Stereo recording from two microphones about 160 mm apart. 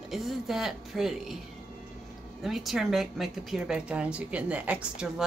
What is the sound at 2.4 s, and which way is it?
Speech, centre (ahead or behind).